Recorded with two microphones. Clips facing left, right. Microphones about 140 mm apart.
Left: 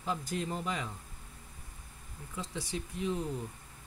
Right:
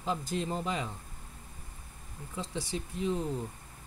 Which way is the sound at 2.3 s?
30° right (ahead or behind).